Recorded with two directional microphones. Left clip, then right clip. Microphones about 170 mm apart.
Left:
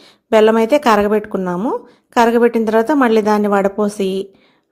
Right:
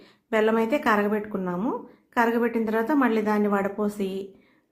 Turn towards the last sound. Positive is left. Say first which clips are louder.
# left 11 dB
turn(degrees=40)  # may be behind; listen again after turning